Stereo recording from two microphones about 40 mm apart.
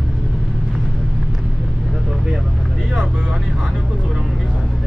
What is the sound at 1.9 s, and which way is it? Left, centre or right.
Vehicle, centre.